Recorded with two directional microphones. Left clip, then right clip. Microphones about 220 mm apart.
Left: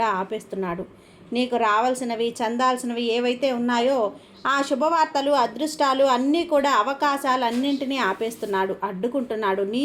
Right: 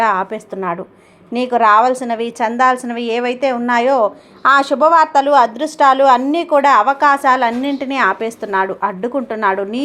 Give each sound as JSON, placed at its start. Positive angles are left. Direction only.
{"t": 0.0, "sound": "a woman's voice", "side_deg": -20}